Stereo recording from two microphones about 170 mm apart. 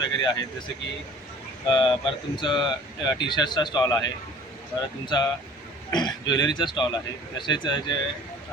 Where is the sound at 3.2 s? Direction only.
25° left (ahead or behind).